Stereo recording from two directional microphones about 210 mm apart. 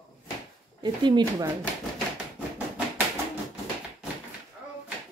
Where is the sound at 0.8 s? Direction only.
20° right (ahead or behind).